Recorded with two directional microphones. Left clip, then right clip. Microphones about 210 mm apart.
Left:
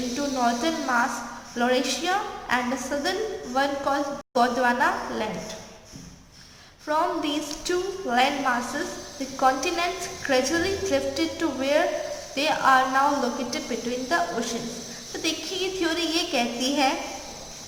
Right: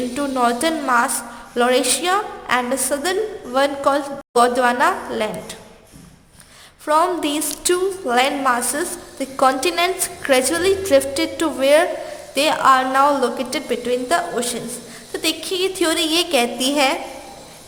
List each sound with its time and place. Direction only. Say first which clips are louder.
0.2 s a woman's voice: right 6 dB; 55° right (ahead or behind)
6.8 s a woman's voice: right 7 dB; 55° right (ahead or behind)
15.2 s a woman's voice: right 7 dB; 55° right (ahead or behind)